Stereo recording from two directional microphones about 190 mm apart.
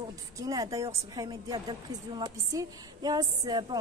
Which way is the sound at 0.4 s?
20° right (ahead or behind).